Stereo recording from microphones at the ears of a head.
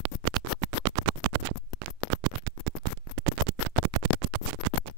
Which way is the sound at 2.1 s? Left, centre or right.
Right.